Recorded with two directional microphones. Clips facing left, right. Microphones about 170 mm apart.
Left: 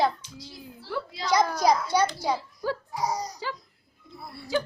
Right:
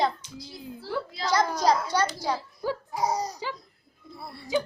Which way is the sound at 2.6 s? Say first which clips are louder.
Right 2 dB; 20° right (ahead or behind).